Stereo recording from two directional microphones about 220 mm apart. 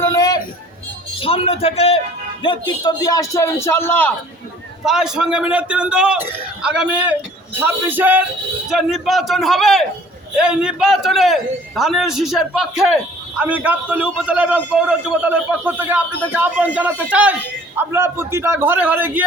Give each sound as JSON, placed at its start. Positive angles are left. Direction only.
{"t": 0.1, "sound": "a sound", "side_deg": 15}
{"t": 1.2, "sound": "a man's voice", "side_deg": 25}
{"t": 4.8, "sound": "a man's voice", "side_deg": 0}